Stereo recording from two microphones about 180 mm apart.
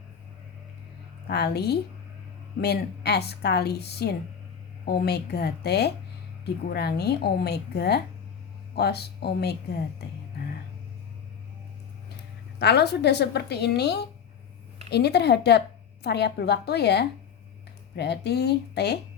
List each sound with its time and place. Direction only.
1.3 s speech: 65° left (ahead or behind)
12.5 s speech: 70° left (ahead or behind)